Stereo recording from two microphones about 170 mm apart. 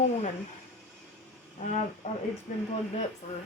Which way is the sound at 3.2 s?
50° left (ahead or behind).